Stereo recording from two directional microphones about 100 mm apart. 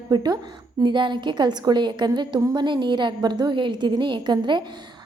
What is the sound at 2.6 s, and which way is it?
A woman's voice, 50° right (ahead or behind).